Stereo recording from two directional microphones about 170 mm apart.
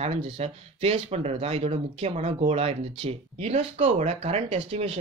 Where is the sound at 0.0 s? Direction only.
40° right (ahead or behind).